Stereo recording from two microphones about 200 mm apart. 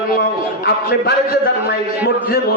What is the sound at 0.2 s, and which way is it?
A man's voice, 55° left (ahead or behind).